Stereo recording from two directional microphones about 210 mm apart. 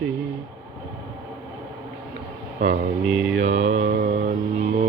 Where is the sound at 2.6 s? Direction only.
35° right (ahead or behind).